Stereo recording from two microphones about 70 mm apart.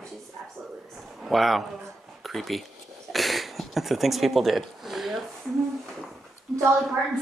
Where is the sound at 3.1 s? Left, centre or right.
Centre.